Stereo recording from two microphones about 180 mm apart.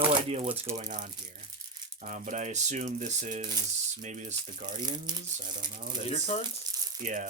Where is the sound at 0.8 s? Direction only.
45° right (ahead or behind).